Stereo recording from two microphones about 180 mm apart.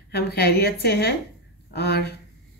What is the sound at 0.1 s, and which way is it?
A woman's voice, 60° left (ahead or behind).